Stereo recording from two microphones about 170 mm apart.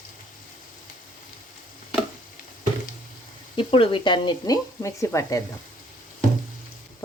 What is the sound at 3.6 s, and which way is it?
Speech, 30° left (ahead or behind).